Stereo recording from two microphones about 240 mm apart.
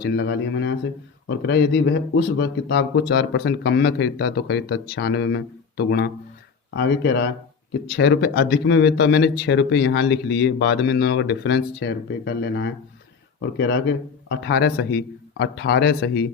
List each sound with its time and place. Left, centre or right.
0.0 s speech: left